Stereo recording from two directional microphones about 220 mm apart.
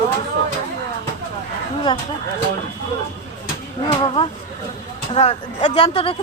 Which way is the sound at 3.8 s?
25° left (ahead or behind).